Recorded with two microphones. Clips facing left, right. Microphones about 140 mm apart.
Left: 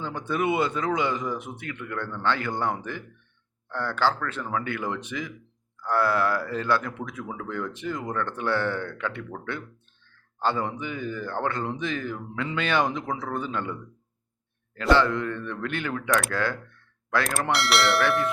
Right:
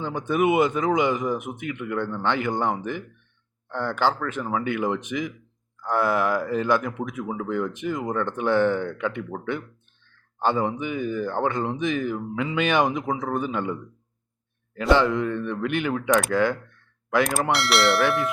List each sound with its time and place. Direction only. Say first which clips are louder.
0.0 s speech: right 5 dB; 15° right (ahead or behind)
14.8 s speech: right 2 dB; 15° right (ahead or behind)
17.5 s speech: left 1 dB; centre (ahead or behind)